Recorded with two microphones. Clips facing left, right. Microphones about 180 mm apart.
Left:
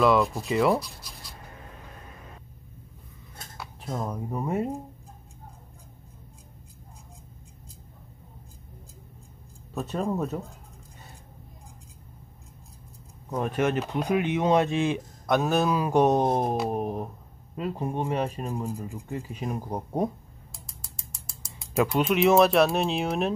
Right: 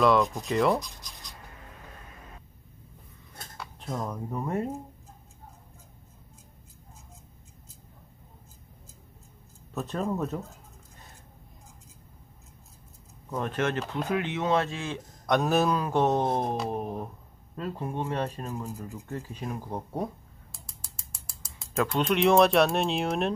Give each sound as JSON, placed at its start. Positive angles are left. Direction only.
{"t": 0.0, "sound": "speech", "side_deg": 5}
{"t": 3.5, "sound": "speech", "side_deg": 5}
{"t": 9.8, "sound": "speech", "side_deg": 5}
{"t": 13.3, "sound": "speech", "side_deg": 10}
{"t": 15.2, "sound": "speech", "side_deg": 0}
{"t": 15.8, "sound": "speech", "side_deg": 15}
{"t": 21.7, "sound": "speech", "side_deg": 5}